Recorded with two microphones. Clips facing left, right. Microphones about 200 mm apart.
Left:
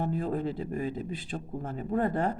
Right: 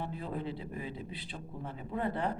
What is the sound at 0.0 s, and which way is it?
Speech, 45° left (ahead or behind).